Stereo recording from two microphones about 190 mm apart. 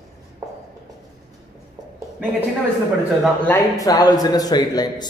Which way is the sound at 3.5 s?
20° left (ahead or behind).